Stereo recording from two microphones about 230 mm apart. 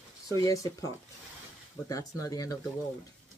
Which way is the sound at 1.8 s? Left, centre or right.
Centre.